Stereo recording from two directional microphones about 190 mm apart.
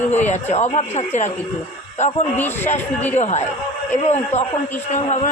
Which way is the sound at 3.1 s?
35° left (ahead or behind).